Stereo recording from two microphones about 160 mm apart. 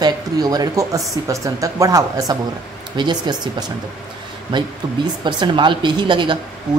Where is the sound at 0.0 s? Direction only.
25° right (ahead or behind).